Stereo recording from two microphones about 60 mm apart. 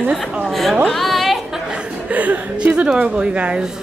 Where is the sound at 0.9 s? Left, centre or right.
Centre.